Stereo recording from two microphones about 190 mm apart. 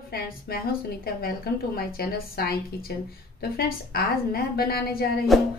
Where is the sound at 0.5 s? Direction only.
55° left (ahead or behind).